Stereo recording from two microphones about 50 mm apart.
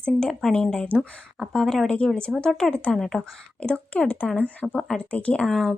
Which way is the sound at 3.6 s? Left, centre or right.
Left.